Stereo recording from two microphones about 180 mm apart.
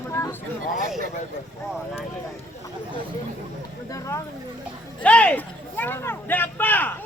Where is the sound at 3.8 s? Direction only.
20° left (ahead or behind).